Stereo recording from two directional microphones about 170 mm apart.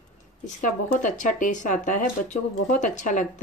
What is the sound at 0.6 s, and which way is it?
Speech, 50° left (ahead or behind).